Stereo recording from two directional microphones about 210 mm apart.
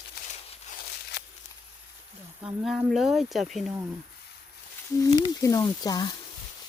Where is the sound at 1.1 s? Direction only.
55° left (ahead or behind).